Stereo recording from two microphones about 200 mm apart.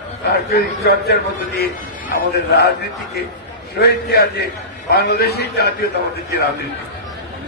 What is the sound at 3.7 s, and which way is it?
A man's voice, 55° left (ahead or behind).